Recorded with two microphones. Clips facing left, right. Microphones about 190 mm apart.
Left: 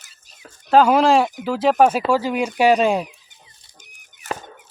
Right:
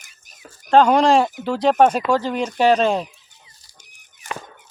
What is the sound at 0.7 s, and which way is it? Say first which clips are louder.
Speech: even; 5° left (ahead or behind).